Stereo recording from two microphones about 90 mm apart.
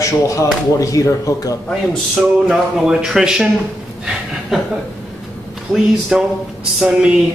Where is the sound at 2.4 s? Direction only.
5° right (ahead or behind).